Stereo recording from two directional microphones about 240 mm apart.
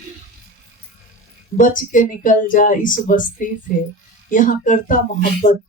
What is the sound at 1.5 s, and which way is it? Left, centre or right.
Speech, left.